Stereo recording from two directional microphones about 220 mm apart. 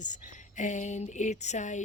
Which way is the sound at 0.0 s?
35° left (ahead or behind).